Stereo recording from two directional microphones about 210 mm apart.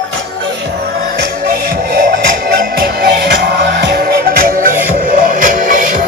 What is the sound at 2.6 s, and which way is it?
Music, 45° right (ahead or behind).